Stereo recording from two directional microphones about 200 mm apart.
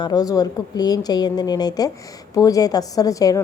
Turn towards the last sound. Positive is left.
turn(degrees=15)  # may be behind; listen again after turning